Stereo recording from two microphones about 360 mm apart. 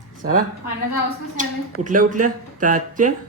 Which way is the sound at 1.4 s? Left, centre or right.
Right.